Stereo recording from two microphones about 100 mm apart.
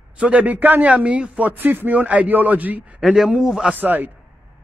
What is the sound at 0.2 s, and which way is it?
A man's voice, 15° right (ahead or behind).